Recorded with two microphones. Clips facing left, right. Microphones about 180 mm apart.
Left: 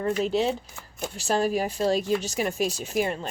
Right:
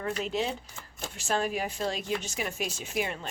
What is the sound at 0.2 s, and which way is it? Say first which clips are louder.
A woman's voice: left 7 dB; 35° left (ahead or behind).